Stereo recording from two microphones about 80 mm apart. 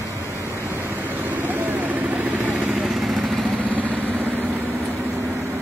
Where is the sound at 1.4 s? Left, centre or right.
Right.